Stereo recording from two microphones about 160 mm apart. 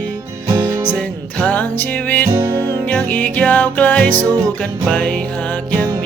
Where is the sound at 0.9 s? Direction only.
10° left (ahead or behind).